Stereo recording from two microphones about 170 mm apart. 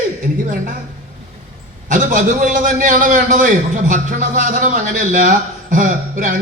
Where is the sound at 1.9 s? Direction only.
50° right (ahead or behind).